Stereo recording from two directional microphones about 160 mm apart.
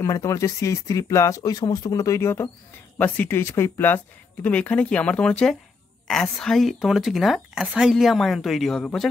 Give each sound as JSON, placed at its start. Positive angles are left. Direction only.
{"t": 0.0, "sound": "speech", "side_deg": 20}